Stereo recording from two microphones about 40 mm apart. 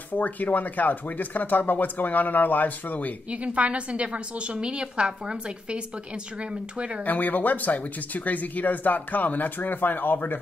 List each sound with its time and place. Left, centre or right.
0.1 s speech: left
3.3 s a woman's voice: right
7.0 s speech: left